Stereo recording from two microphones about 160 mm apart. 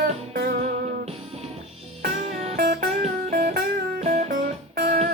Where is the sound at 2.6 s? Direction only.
75° right (ahead or behind).